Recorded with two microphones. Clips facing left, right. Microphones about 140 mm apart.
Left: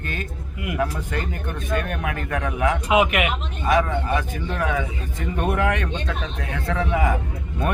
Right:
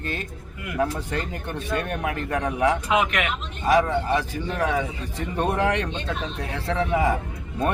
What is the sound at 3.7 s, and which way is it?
A man's voice, 35° right (ahead or behind).